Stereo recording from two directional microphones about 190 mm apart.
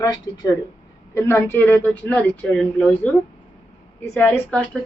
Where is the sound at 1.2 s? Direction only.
10° left (ahead or behind).